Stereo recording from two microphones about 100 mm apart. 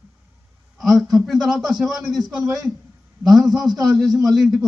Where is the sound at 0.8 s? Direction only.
Centre (ahead or behind).